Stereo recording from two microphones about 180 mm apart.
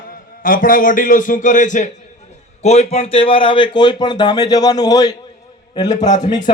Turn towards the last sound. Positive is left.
turn(degrees=25)  # may be behind; listen again after turning